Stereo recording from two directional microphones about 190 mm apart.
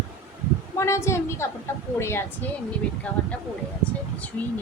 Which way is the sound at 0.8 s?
15° left (ahead or behind).